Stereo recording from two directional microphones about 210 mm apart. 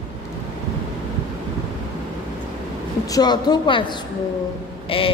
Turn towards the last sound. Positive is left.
turn(degrees=25)  # may be behind; listen again after turning